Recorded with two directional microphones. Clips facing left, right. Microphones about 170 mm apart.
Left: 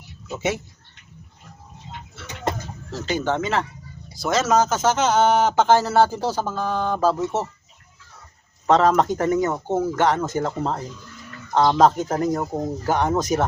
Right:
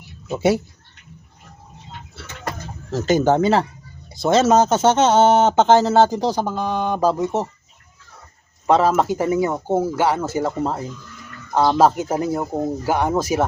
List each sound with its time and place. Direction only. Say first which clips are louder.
0.3 s speech: right 7 dB; 35° right (ahead or behind)
2.2 s bird: left 4 dB; 25° left (ahead or behind)
2.9 s speech: right 7 dB; 45° right (ahead or behind); by 7.4 s 15° right (ahead or behind)
8.6 s speech: right 1 dB; 10° right (ahead or behind)